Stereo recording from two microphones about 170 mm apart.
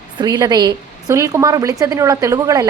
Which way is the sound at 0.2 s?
20° right (ahead or behind).